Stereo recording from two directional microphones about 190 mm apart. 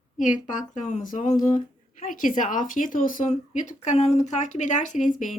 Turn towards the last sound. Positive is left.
turn(degrees=40)  # may be behind; listen again after turning